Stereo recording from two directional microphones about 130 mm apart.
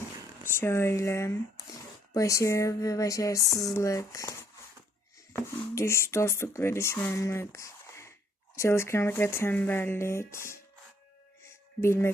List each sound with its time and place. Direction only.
0.4 s speech: 20° left (ahead or behind)
11.4 s music: 20° left (ahead or behind)